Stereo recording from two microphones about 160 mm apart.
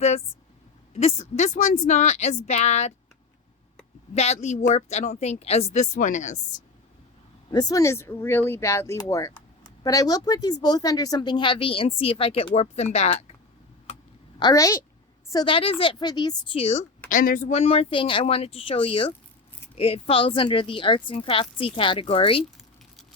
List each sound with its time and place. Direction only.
0.9 s speech: 40° left (ahead or behind)
4.1 s speech: 45° left (ahead or behind)
7.5 s speech: 25° left (ahead or behind); by 13.2 s 40° left (ahead or behind)
14.3 s a woman's voice: 25° left (ahead or behind)
17.1 s speech: 60° left (ahead or behind)
17.5 s speech: 40° left (ahead or behind)